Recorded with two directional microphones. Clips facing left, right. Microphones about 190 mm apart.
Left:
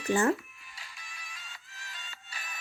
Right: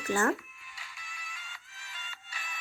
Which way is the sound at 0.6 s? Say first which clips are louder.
Even; 35° left (ahead or behind).